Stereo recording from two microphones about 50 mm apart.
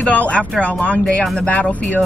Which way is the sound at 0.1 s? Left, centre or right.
Left.